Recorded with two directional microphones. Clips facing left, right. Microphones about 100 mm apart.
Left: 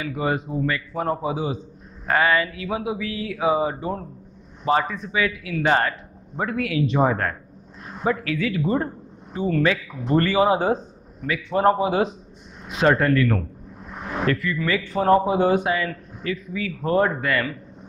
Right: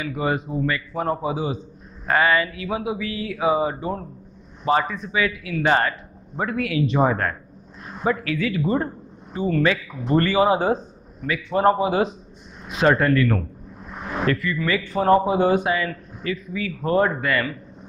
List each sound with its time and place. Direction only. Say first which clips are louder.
0.0 s speech: even; 20° right (ahead or behind)